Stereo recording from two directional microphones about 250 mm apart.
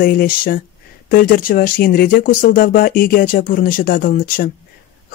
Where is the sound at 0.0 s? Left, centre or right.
Left.